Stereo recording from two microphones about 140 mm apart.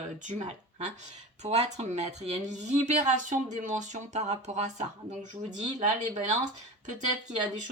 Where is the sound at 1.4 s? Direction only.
50° right (ahead or behind).